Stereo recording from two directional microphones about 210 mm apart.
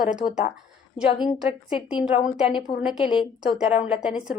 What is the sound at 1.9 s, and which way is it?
A woman's voice, 25° left (ahead or behind).